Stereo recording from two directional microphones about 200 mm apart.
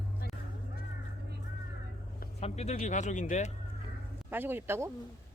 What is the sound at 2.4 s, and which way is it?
Speech, 35° left (ahead or behind).